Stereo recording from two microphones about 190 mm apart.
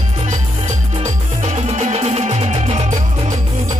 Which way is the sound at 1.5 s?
35° right (ahead or behind).